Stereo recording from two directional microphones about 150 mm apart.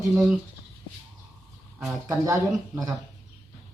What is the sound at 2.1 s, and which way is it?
Speech, 20° right (ahead or behind).